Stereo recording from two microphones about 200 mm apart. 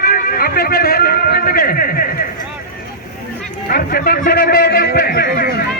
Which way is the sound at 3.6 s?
45° left (ahead or behind).